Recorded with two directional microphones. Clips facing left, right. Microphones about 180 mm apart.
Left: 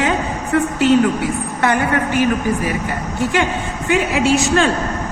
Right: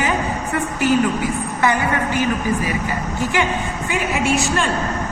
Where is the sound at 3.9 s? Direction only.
70° left (ahead or behind).